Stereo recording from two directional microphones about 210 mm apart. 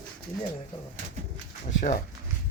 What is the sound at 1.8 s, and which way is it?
Speech, 35° left (ahead or behind).